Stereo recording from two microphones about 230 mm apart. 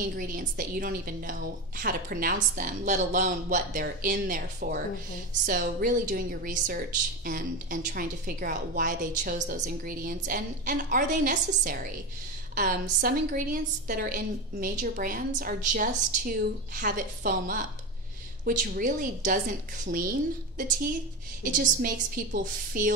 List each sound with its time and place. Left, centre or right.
0.0 s a woman's voice: right